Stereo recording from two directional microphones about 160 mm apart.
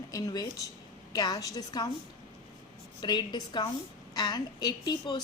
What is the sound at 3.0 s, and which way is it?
A woman's voice, 25° left (ahead or behind).